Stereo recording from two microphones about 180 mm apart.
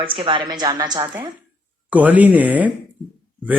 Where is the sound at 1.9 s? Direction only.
10° right (ahead or behind).